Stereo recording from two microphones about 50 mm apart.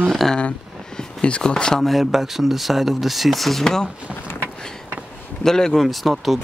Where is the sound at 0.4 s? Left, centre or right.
Left.